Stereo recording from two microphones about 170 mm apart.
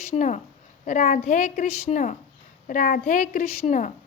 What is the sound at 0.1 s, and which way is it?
A woman's voice, 45° left (ahead or behind).